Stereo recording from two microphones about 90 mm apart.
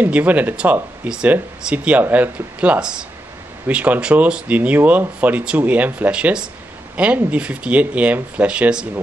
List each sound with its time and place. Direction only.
0.0 s speech: 20° right (ahead or behind)